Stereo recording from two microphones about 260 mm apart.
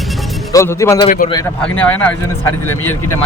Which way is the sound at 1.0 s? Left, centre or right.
Left.